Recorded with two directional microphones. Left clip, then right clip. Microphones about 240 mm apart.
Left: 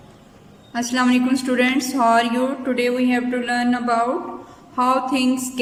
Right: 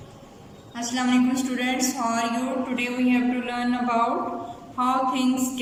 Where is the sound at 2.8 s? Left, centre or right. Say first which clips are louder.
Left 4 dB; left.